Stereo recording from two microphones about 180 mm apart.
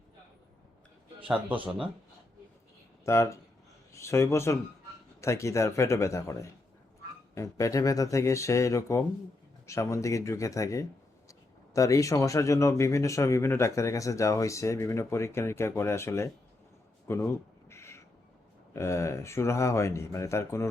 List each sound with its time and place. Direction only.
3.0 s speech: 15° left (ahead or behind)
17.7 s owl: 15° left (ahead or behind)
18.7 s speech: 15° left (ahead or behind)